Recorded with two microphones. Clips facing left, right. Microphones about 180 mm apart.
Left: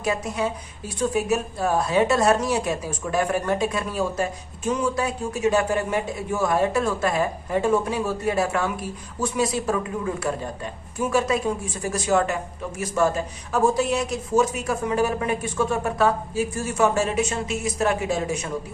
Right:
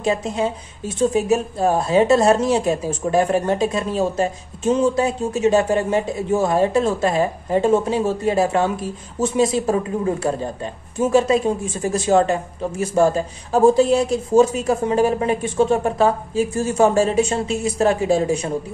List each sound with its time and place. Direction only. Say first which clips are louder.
0.0 s speech: right 4 dB; 25° right (ahead or behind)